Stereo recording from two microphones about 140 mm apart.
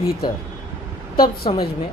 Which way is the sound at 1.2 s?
40° left (ahead or behind).